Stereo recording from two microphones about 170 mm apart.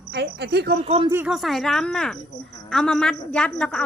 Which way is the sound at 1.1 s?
10° right (ahead or behind).